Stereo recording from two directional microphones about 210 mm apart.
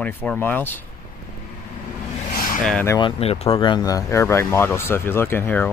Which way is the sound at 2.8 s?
20° left (ahead or behind).